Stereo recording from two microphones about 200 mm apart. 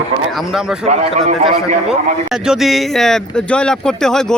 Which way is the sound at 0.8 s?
35° right (ahead or behind).